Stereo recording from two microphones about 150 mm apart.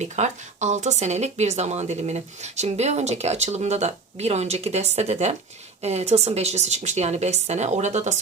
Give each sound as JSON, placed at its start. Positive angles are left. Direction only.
{"t": 0.0, "sound": "speech", "side_deg": -50}